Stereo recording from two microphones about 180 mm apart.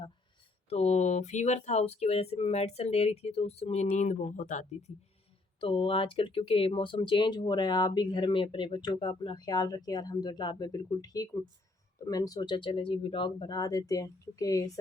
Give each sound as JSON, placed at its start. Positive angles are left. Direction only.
{"t": 0.7, "sound": "speech", "side_deg": 40}
{"t": 5.5, "sound": "speech", "side_deg": 30}